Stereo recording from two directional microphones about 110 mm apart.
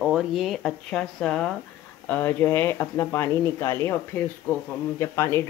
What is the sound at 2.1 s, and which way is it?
Speech, 15° left (ahead or behind).